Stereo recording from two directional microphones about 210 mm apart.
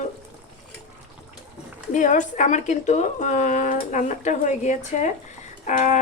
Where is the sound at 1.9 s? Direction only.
35° left (ahead or behind).